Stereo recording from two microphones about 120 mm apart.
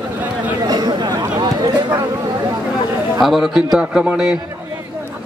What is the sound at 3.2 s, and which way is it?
A man's voice, centre (ahead or behind).